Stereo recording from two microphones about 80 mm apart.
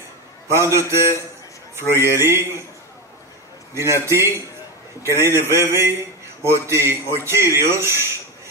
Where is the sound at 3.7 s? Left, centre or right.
Right.